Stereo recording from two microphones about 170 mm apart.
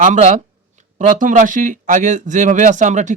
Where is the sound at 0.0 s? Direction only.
45° right (ahead or behind).